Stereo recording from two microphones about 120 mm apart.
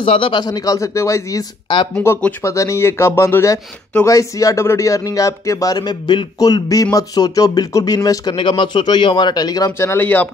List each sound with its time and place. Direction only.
0.0 s a man's voice: 50° left (ahead or behind); by 1.4 s 25° left (ahead or behind)
2.0 s speech: 15° left (ahead or behind)
2.4 s speech: 25° left (ahead or behind)
8.4 s a man's voice: 45° left (ahead or behind); by 10.3 s 15° left (ahead or behind)